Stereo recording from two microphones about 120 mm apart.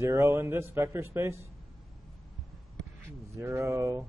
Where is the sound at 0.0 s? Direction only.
20° right (ahead or behind).